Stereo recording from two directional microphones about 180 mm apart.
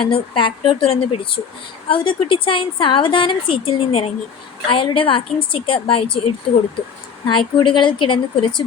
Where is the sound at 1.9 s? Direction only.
30° left (ahead or behind).